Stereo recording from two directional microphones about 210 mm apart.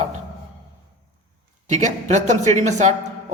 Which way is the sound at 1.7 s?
35° right (ahead or behind).